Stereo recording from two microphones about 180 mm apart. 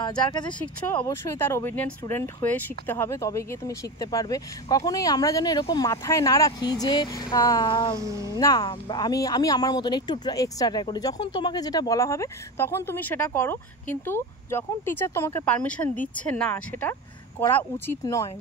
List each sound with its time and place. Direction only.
0.3 s speech: 25° left (ahead or behind)
0.6 s speech: 10° left (ahead or behind)
8.0 s speech: 20° right (ahead or behind)
8.3 s speech: 20° left (ahead or behind)